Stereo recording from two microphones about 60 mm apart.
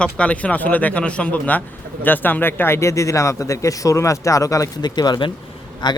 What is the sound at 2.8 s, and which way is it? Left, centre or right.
Speech, left.